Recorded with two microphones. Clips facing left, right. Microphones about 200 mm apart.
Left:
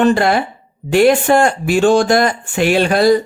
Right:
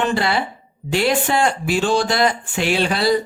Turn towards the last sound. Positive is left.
turn(degrees=50)  # may be behind; listen again after turning